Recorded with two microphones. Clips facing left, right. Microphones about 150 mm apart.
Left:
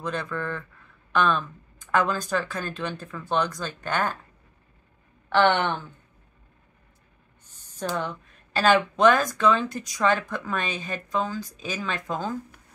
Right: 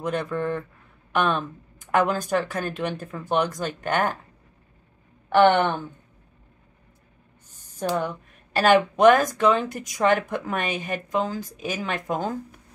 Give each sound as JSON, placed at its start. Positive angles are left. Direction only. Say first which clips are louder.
{"t": 0.0, "sound": "speech", "louder": "right 4 dB", "side_deg": -15}
{"t": 5.3, "sound": "speech", "louder": "right 4 dB", "side_deg": -15}
{"t": 8.7, "sound": "speech", "louder": "right 5 dB", "side_deg": -15}